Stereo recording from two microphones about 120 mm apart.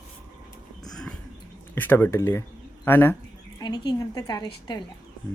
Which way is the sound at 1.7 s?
15° left (ahead or behind).